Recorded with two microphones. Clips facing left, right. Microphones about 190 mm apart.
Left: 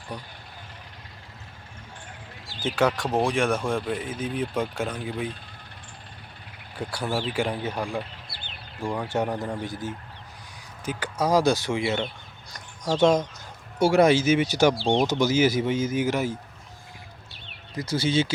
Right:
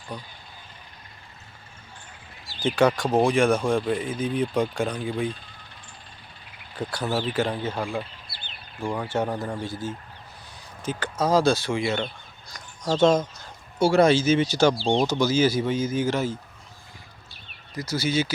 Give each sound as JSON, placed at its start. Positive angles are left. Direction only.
{"t": 2.6, "sound": "speech", "side_deg": 0}
{"t": 6.7, "sound": "speech", "side_deg": 10}
{"t": 8.8, "sound": "speech", "side_deg": 0}
{"t": 9.0, "sound": "speech", "side_deg": 20}
{"t": 17.7, "sound": "speech", "side_deg": 30}